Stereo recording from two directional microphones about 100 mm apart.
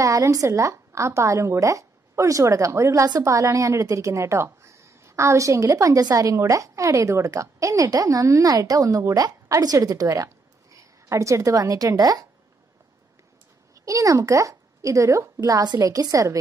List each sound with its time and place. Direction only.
0.0 s a woman's voice: 35° right (ahead or behind)
13.8 s a woman's voice: 35° right (ahead or behind)